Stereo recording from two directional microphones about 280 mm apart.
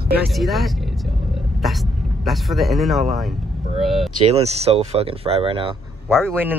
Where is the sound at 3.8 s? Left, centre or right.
Centre.